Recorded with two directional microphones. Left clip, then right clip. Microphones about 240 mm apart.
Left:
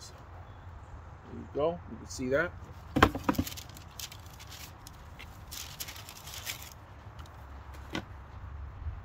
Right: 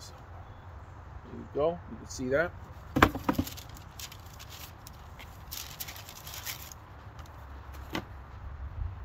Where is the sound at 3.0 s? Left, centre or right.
Centre.